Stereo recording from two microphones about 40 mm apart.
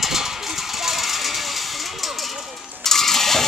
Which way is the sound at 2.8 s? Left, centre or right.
Centre.